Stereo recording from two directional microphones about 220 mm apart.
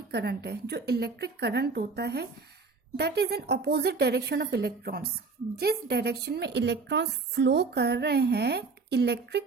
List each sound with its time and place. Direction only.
0.1 s a woman's voice: 50° right (ahead or behind)